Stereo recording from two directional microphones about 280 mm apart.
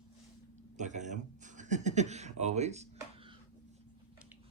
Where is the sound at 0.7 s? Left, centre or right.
Right.